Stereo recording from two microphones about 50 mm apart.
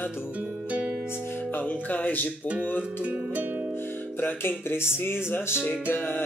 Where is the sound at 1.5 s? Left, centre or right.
Left.